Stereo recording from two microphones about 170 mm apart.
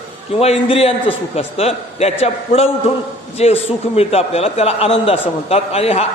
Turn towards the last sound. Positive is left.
turn(degrees=35)  # may be behind; listen again after turning